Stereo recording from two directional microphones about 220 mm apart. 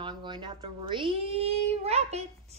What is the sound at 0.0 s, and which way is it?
A child's voice, 20° right (ahead or behind).